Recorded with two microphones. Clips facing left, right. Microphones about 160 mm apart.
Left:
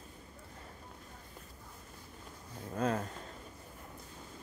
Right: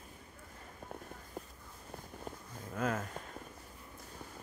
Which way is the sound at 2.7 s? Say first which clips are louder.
Left 2 dB; 30° left (ahead or behind).